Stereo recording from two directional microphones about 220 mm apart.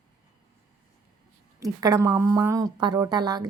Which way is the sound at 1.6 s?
15° right (ahead or behind).